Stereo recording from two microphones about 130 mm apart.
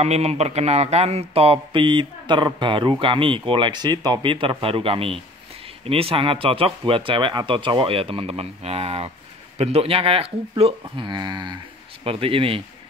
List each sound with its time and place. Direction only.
0.0 s speech: 55° right (ahead or behind)